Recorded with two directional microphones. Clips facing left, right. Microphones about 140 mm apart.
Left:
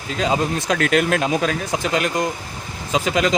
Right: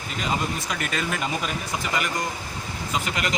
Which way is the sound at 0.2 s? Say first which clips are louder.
Left 7 dB; 90° left.